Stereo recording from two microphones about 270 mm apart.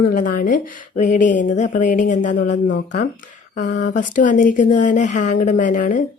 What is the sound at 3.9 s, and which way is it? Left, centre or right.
A woman's voice, left.